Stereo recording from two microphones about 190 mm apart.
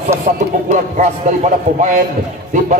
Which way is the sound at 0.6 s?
40° right (ahead or behind).